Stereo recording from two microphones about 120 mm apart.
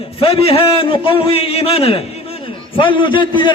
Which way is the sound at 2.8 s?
45° left (ahead or behind).